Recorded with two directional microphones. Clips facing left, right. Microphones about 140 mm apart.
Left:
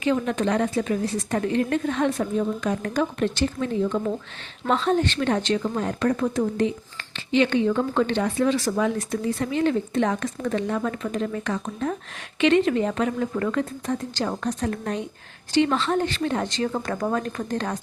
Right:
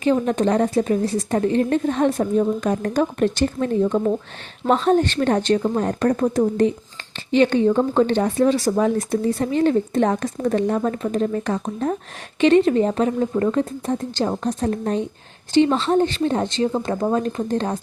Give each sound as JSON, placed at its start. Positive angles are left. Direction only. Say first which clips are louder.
{"t": 0.0, "sound": "speech", "louder": "right 4 dB", "side_deg": -40}